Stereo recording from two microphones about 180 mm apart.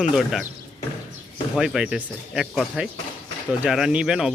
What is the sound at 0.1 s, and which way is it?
Speech, centre (ahead or behind).